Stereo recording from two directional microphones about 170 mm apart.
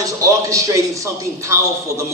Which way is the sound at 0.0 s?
20° right (ahead or behind).